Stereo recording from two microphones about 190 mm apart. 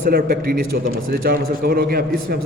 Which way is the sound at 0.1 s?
50° right (ahead or behind).